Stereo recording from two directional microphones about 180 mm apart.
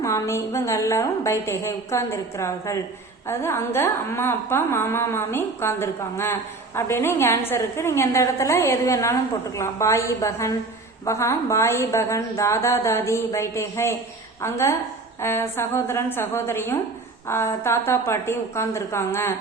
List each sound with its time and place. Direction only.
0.0 s a woman's voice: 15° left (ahead or behind)